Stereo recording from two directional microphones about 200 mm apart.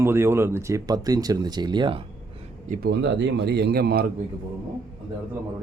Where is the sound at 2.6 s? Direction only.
45° right (ahead or behind).